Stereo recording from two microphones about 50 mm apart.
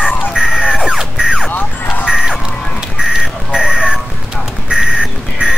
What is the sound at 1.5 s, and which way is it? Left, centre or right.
Music, left.